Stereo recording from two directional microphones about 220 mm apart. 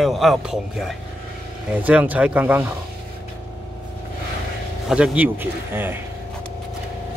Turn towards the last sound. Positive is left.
turn(degrees=-10)  # may be behind; listen again after turning